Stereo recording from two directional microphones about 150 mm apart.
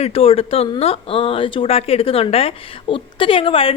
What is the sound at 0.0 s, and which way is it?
A woman's voice, 40° left (ahead or behind).